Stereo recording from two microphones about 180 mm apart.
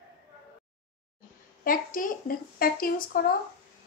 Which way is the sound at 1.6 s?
50° left (ahead or behind).